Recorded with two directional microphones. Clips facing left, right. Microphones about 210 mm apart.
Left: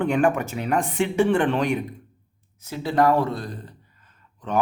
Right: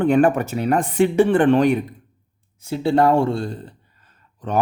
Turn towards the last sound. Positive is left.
turn(degrees=-35)  # may be behind; listen again after turning